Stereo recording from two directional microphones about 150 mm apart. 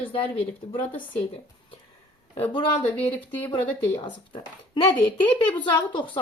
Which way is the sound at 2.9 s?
10° left (ahead or behind).